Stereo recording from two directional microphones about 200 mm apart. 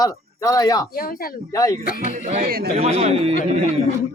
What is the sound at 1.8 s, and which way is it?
Speech, 45° left (ahead or behind).